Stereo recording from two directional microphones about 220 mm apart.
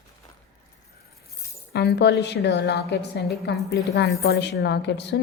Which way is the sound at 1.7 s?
45° left (ahead or behind).